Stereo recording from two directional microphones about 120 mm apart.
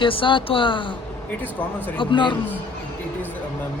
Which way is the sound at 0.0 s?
45° left (ahead or behind).